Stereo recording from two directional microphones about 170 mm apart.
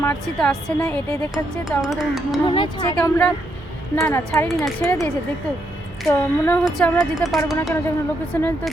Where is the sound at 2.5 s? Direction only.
30° left (ahead or behind).